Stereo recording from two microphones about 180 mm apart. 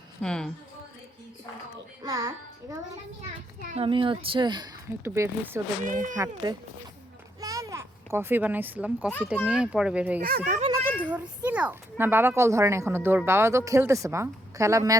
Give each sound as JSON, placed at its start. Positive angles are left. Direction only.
{"t": 0.2, "sound": "speech", "side_deg": 5}
{"t": 2.0, "sound": "a child's voice", "side_deg": -20}
{"t": 3.7, "sound": "speech", "side_deg": -30}
{"t": 5.8, "sound": "speech", "side_deg": -45}
{"t": 6.1, "sound": "speech", "side_deg": -20}
{"t": 7.4, "sound": "a sound", "side_deg": -20}
{"t": 9.0, "sound": "a child's voice", "side_deg": 5}
{"t": 9.3, "sound": "speech", "side_deg": -5}
{"t": 10.2, "sound": "speech", "side_deg": -50}
{"t": 11.0, "sound": "a child's voice", "side_deg": -5}